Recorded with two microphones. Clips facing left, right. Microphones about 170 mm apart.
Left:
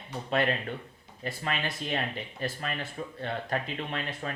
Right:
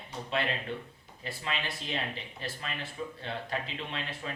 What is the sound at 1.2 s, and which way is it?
A man's voice, 50° left (ahead or behind).